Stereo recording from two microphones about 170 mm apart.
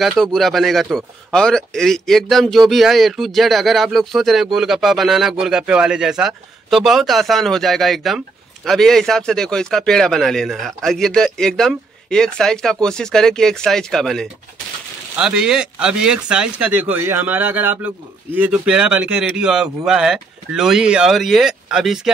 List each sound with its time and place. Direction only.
0.0 s speech: centre (ahead or behind)